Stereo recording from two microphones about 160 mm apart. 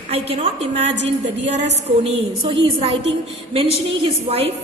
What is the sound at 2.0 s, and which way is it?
A woman's voice, 40° right (ahead or behind).